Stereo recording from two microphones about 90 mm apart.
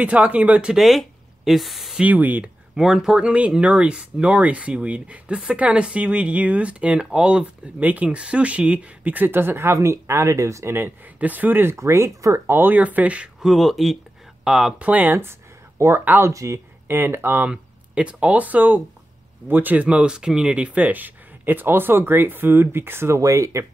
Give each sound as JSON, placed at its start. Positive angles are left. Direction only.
{"t": 0.0, "sound": "speech", "side_deg": -15}
{"t": 2.0, "sound": "speech", "side_deg": -20}
{"t": 2.7, "sound": "speech", "side_deg": -5}
{"t": 11.1, "sound": "speech", "side_deg": -20}
{"t": 13.4, "sound": "speech", "side_deg": 0}
{"t": 17.5, "sound": "speech", "side_deg": -10}